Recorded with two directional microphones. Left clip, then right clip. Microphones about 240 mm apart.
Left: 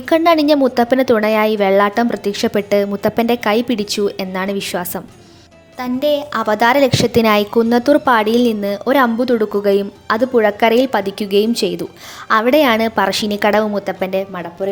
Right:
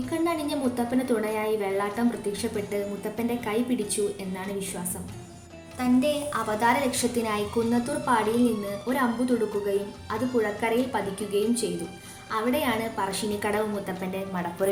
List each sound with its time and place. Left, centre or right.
0.1 s a woman's voice: left